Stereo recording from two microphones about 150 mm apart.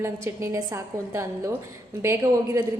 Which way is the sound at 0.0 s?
20° right (ahead or behind).